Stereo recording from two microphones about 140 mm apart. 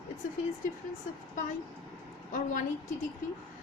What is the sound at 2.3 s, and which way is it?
Speech, 70° left (ahead or behind).